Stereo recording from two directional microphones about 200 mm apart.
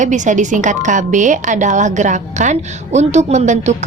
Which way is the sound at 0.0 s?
40° right (ahead or behind).